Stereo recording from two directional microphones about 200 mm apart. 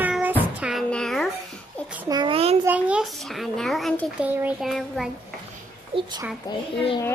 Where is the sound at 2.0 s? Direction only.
20° right (ahead or behind).